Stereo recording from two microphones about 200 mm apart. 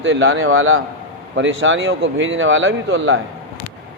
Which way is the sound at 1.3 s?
70° right (ahead or behind).